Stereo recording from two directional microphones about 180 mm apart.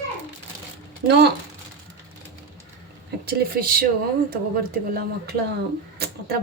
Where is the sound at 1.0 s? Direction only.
70° right (ahead or behind).